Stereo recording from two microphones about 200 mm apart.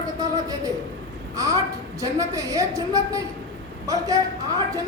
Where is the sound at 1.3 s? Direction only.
15° right (ahead or behind).